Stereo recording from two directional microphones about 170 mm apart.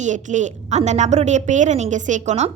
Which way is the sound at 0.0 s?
45° right (ahead or behind).